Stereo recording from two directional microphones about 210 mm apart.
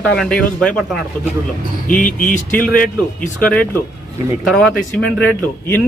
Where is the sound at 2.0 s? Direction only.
40° left (ahead or behind).